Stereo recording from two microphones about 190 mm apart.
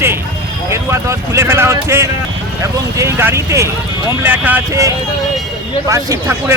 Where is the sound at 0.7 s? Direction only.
15° right (ahead or behind).